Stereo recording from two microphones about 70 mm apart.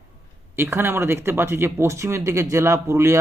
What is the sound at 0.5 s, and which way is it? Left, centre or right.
A man's voice, right.